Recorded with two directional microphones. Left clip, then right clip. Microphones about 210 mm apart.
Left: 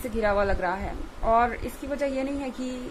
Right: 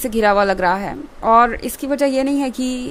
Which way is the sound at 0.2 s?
50° right (ahead or behind).